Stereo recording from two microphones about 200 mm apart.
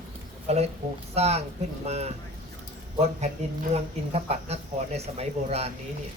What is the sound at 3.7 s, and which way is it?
Speech, 30° right (ahead or behind).